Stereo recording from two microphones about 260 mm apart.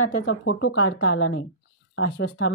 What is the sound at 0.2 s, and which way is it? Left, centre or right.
A woman's voice, left.